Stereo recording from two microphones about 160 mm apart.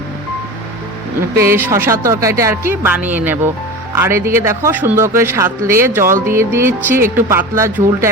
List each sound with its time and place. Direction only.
1.4 s a man's voice: 15° right (ahead or behind)